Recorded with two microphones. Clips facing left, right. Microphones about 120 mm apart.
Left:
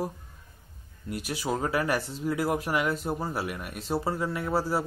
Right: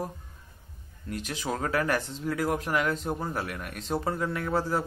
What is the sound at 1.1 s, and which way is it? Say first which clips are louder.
Speech: left 2 dB; 5° left (ahead or behind).